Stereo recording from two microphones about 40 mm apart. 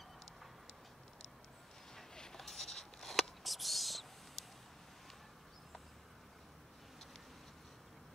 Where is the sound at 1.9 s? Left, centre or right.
Centre.